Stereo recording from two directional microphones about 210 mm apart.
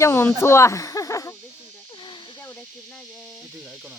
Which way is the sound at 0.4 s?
15° left (ahead or behind).